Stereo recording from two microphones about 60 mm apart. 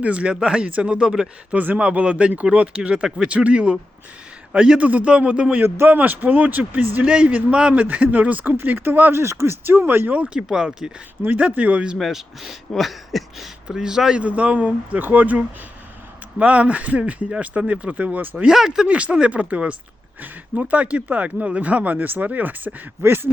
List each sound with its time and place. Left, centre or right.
0.0 s speech: right
1.5 s speech: right
5.6 s speech: right
5.9 s speech: right
7.0 s speech: centre
9.1 s speech: right
10.1 s speech: right
11.3 s speech: right
11.9 s speech: centre
13.7 s speech: centre
14.2 s speech: right
18.4 s speech: centre; by 22.7 s right
23.0 s speech: right